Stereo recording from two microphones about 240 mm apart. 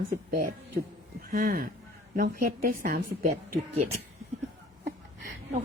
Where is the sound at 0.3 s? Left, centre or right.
Right.